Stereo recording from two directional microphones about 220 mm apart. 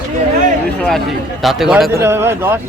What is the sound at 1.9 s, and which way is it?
Speech, 10° right (ahead or behind).